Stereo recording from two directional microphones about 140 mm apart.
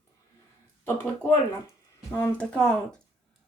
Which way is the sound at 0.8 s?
15° left (ahead or behind).